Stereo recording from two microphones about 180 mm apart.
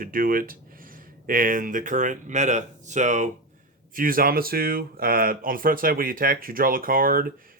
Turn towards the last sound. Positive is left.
turn(degrees=-50)  # may be behind; listen again after turning